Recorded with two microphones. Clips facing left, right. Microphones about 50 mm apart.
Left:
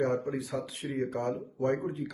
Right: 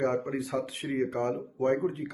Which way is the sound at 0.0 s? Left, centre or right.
Right.